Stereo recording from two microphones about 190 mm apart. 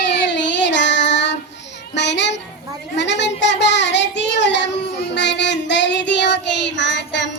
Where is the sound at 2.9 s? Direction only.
65° left (ahead or behind).